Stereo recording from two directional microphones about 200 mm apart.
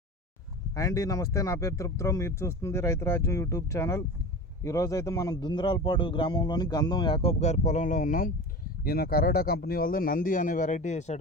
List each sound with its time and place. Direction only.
0.8 s a man's voice: 15° left (ahead or behind); by 11.2 s 35° left (ahead or behind)